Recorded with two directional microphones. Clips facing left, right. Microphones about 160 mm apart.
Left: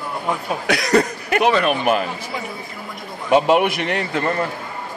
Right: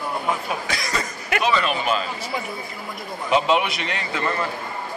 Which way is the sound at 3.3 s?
55° left (ahead or behind).